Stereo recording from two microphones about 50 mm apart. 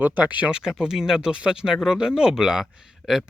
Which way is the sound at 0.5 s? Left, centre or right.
Centre.